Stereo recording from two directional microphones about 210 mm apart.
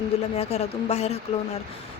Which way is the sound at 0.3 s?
30° left (ahead or behind).